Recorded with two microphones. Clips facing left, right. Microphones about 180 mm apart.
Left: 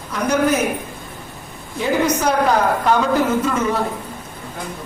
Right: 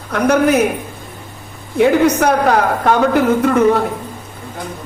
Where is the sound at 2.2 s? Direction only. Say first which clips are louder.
Right 3 dB; 65° right (ahead or behind).